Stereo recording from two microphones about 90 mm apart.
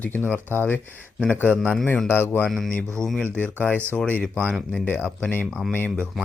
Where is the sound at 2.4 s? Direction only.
Centre (ahead or behind).